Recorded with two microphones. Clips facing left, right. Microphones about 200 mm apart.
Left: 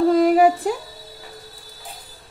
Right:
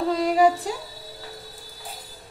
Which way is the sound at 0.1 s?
55° left (ahead or behind).